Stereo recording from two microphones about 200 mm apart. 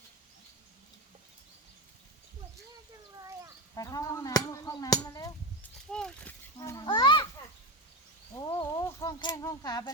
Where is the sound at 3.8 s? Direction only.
15° left (ahead or behind).